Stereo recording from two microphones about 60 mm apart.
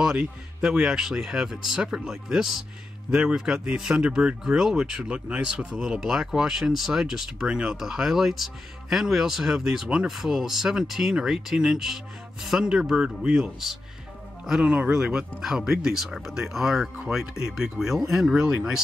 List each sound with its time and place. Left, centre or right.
0.0 s speech: centre
14.6 s speech: right
14.9 s speech: centre